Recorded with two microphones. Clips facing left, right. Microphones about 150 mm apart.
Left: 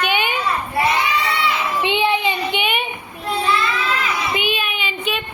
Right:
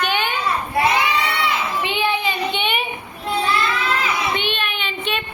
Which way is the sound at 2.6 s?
Centre (ahead or behind).